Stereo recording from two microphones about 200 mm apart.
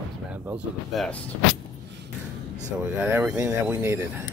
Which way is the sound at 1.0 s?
Centre (ahead or behind).